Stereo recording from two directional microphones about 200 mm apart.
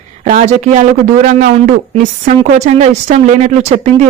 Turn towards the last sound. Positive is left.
turn(degrees=-35)  # may be behind; listen again after turning